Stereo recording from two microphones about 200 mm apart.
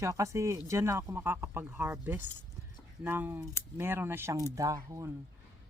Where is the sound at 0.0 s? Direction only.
15° right (ahead or behind).